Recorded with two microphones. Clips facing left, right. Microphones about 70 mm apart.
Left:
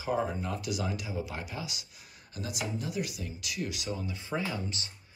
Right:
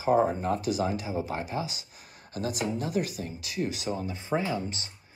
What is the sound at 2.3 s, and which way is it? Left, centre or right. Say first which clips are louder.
Speech: right 6 dB; right.